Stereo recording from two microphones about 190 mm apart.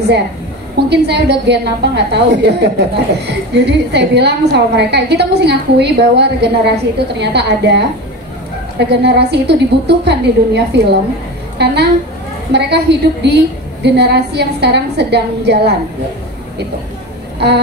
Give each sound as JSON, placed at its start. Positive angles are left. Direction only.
{"t": 0.8, "sound": "a woman's voice", "side_deg": -60}